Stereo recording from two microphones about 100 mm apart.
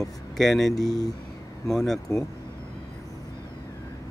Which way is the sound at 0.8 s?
40° left (ahead or behind).